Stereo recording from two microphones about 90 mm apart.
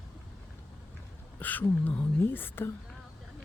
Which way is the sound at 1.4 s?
20° left (ahead or behind).